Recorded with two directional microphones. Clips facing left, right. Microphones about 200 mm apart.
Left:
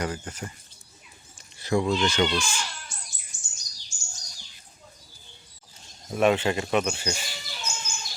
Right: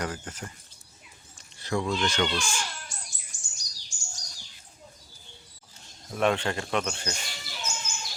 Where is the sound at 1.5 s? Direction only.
10° left (ahead or behind).